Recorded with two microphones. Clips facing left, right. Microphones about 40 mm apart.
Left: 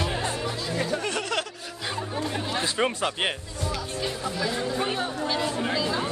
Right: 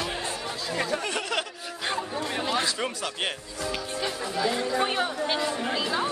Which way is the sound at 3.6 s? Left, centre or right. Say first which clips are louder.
Even; right.